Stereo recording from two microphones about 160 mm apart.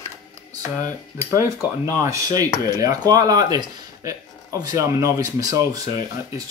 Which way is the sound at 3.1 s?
25° right (ahead or behind).